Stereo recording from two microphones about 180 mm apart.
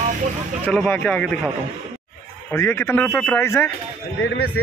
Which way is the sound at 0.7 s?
10° left (ahead or behind).